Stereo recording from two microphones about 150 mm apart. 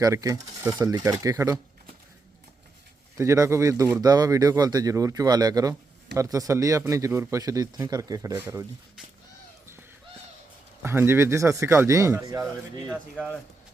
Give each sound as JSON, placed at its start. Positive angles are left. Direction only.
{"t": 0.0, "sound": "speech", "side_deg": -25}
{"t": 3.2, "sound": "speech", "side_deg": -20}
{"t": 10.8, "sound": "speech", "side_deg": -15}
{"t": 12.9, "sound": "speech", "side_deg": -5}